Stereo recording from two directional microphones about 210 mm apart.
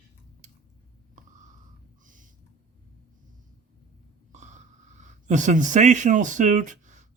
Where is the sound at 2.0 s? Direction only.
40° right (ahead or behind).